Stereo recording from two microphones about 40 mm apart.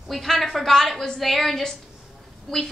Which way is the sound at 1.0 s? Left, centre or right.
Centre.